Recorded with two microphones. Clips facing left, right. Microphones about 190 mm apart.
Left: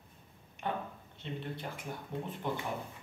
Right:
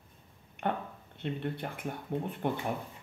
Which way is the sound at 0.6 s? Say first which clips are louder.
Right 4 dB; 60° right (ahead or behind).